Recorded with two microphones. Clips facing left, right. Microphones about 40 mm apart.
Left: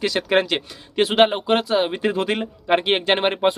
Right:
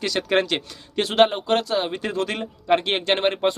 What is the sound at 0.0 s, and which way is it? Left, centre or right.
Speech, centre.